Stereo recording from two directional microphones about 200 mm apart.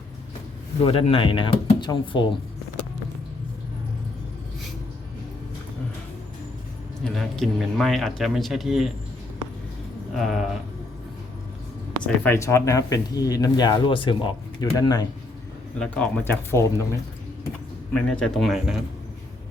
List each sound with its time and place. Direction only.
0.9 s speech: 30° left (ahead or behind)
7.0 s speech: centre (ahead or behind)
10.2 s speech: centre (ahead or behind)
12.0 s speech: 10° left (ahead or behind)
15.8 s speech: 5° left (ahead or behind)
17.9 s speech: 5° left (ahead or behind)